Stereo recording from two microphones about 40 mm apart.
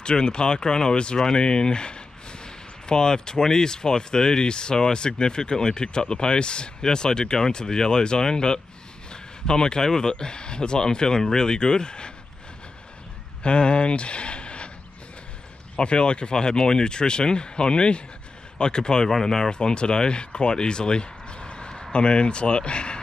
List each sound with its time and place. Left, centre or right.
0.0 s speech: left
13.4 s speech: left
15.7 s speech: left